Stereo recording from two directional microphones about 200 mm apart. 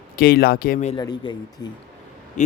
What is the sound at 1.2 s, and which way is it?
Speech, 25° left (ahead or behind).